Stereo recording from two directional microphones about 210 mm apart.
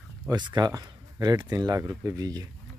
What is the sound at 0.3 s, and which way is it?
Speech, 20° right (ahead or behind).